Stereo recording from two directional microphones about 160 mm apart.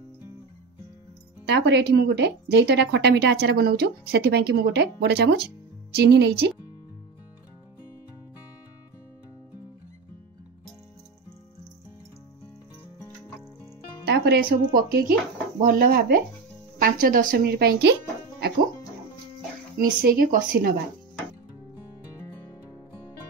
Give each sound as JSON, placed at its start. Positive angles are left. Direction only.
{"t": 1.5, "sound": "a woman's voice", "side_deg": -90}
{"t": 14.0, "sound": "a woman's voice", "side_deg": -90}
{"t": 19.8, "sound": "speech", "side_deg": -65}